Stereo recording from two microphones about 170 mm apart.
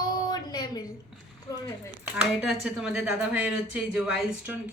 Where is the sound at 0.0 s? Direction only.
25° left (ahead or behind).